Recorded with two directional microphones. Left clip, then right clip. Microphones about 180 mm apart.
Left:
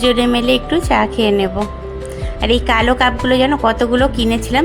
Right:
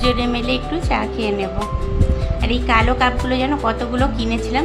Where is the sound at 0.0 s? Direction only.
35° left (ahead or behind).